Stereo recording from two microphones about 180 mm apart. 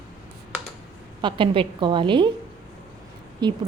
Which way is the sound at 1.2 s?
25° right (ahead or behind).